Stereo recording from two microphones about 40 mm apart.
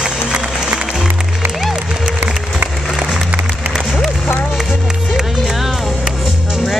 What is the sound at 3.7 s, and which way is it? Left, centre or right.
Music, centre.